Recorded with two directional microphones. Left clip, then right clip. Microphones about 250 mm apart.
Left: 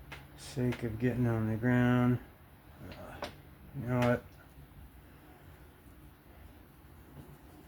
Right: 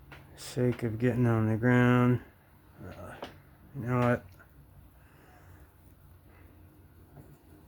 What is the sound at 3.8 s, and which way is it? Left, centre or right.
Speech, right.